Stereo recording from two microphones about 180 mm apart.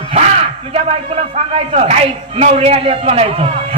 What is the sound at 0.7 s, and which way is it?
A man's voice, 35° right (ahead or behind).